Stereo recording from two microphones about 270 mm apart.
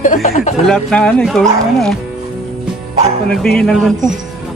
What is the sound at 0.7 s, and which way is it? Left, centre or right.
Speech, centre.